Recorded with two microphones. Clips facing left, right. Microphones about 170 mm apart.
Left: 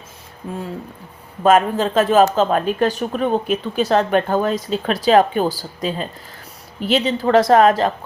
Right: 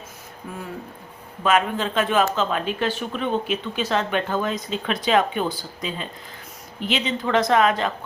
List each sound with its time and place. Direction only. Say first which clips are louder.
1.5 s speech: left 6 dB; 45° left (ahead or behind)
6.8 s speech: left 7 dB; 40° left (ahead or behind)